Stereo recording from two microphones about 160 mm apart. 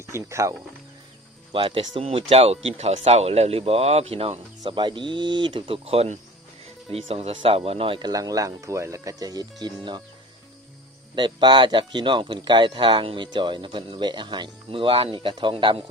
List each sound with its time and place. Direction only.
0.0 s speech: 20° right (ahead or behind)
1.5 s speech: 30° right (ahead or behind)
11.1 s speech: 30° right (ahead or behind)